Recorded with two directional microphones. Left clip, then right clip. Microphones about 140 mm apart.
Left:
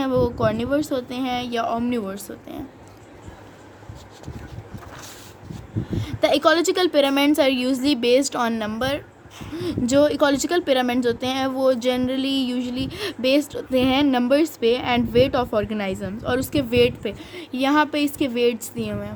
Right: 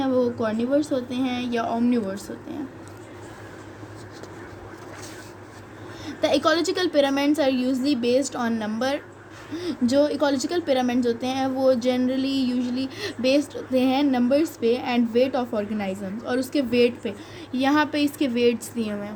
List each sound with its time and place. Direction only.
0.0 s speech: 45° left (ahead or behind)
6.0 s speech: 40° left (ahead or behind)